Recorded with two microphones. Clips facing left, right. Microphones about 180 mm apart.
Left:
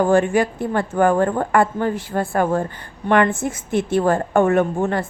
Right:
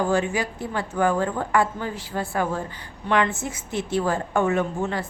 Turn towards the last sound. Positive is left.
turn(degrees=50)  # may be behind; listen again after turning